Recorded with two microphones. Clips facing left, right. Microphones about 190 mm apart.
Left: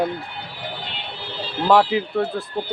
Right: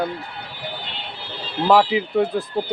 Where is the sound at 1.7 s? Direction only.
Centre (ahead or behind).